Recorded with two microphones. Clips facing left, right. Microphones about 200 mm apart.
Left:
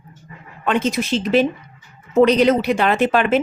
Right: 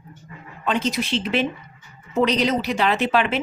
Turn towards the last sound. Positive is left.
turn(degrees=45)  # may be behind; listen again after turning